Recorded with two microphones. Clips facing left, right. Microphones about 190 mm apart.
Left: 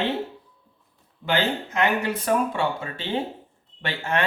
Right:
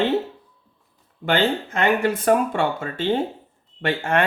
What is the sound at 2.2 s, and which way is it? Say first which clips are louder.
Speech: right 4 dB; 55° right (ahead or behind).